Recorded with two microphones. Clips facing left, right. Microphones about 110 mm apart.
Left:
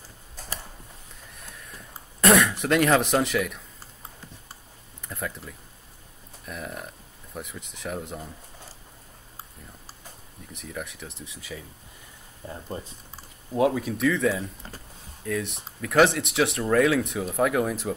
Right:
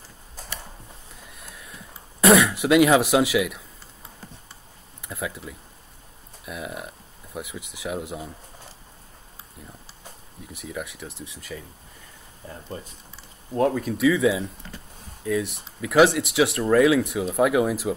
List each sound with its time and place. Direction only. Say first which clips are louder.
1.4 s throat clearing: even; centre (ahead or behind)
5.0 s speech: right 2 dB; 5° right (ahead or behind)
10.5 s speech: right 2 dB; 5° right (ahead or behind)
12.4 s speech: left 2 dB; 20° left (ahead or behind)
13.5 s speech: right 1 dB; 5° left (ahead or behind)
14.6 s speech: right 1 dB; 35° left (ahead or behind)
15.2 s speech: right 4 dB; centre (ahead or behind)